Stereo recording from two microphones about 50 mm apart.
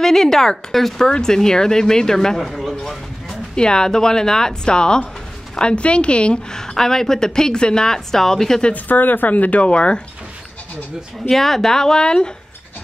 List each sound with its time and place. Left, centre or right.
0.0 s a woman's voice: centre
3.5 s a woman's voice: centre
8.7 s speech: left
11.2 s a woman's voice: centre